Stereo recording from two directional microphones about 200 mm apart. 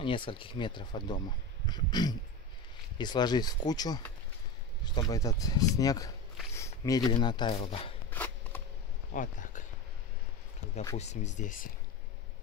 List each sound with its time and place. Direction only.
0.0 s speech: 25° left (ahead or behind)
8.1 s shuffling cards: 10° left (ahead or behind)
9.1 s a sound: 40° left (ahead or behind)
11.0 s speech: 35° left (ahead or behind)